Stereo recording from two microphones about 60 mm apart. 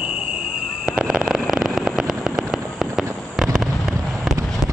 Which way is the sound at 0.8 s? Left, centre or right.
Centre.